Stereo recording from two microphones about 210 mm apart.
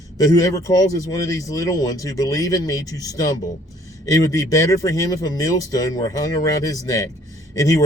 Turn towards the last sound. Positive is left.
turn(degrees=15)  # may be behind; listen again after turning